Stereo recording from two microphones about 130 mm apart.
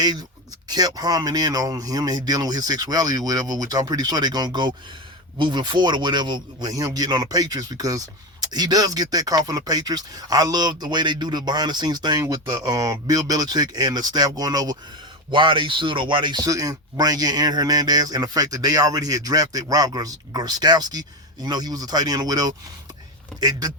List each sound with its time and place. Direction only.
0.0 s speech: 30° right (ahead or behind)